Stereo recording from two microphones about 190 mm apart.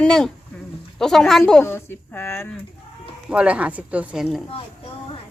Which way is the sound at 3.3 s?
5° right (ahead or behind).